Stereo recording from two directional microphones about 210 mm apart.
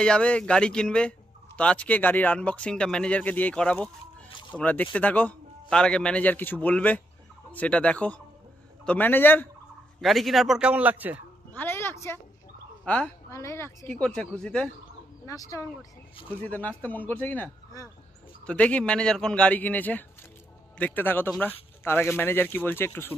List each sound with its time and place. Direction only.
0.0 s a man's voice: 5° left (ahead or behind)
11.5 s a sound: 10° left (ahead or behind)
12.8 s a man's voice: 5° left (ahead or behind)
15.2 s a man's voice: 15° left (ahead or behind)